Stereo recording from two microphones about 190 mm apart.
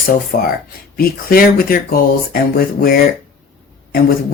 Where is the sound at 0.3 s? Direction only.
50° left (ahead or behind).